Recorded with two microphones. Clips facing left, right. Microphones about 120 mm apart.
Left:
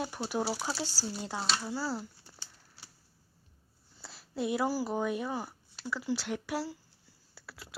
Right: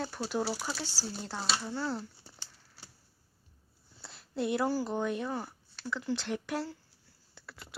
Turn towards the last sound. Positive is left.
turn(degrees=5)  # may be behind; listen again after turning